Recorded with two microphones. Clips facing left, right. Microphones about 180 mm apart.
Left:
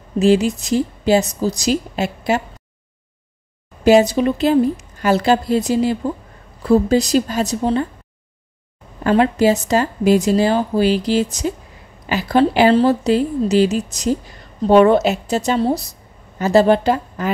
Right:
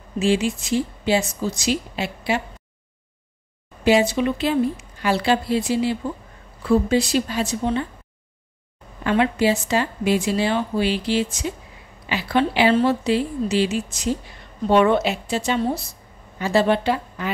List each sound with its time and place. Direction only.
0.2 s a woman's voice: 40° left (ahead or behind)
3.8 s a woman's voice: 40° left (ahead or behind)
9.0 s a woman's voice: 40° left (ahead or behind)